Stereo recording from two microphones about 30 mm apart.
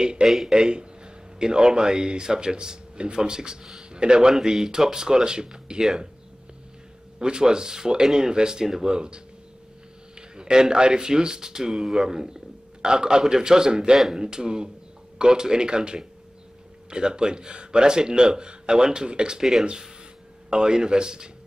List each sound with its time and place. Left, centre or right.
0.5 s a man's voice: right
4.3 s speech: centre
7.2 s speech: right
8.8 s speech: right
10.3 s speech: right